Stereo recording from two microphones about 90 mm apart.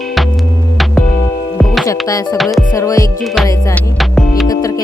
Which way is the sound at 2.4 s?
Centre (ahead or behind).